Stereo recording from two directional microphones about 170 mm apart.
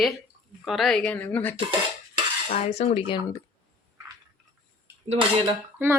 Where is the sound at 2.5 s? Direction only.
45° left (ahead or behind).